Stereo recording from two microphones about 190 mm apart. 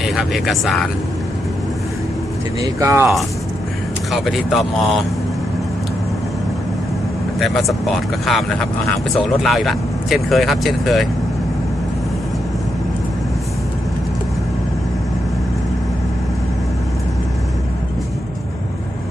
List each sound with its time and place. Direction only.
0.0 s speech: centre (ahead or behind)
2.6 s speech: 15° right (ahead or behind)
4.1 s speech: centre (ahead or behind)
7.3 s speech: centre (ahead or behind)